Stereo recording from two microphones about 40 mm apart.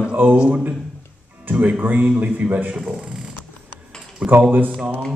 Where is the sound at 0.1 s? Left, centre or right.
Right.